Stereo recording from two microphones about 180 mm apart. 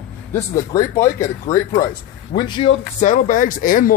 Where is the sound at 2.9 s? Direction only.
45° left (ahead or behind).